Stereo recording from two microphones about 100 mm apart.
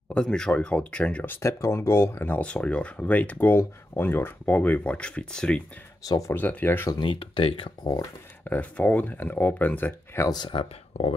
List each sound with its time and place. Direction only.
0.1 s speech: 5° left (ahead or behind)
6.0 s speech: 35° left (ahead or behind)
6.3 s speech: 20° left (ahead or behind)
6.9 s speech: 55° left (ahead or behind)
8.5 s speech: 15° left (ahead or behind)
10.3 s speech: 55° left (ahead or behind); by 11.1 s 80° left